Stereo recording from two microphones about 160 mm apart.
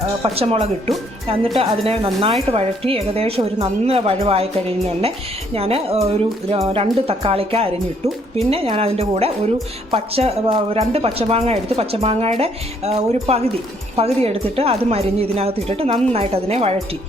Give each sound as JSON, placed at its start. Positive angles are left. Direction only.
{"t": 0.2, "sound": "a woman's voice", "side_deg": -35}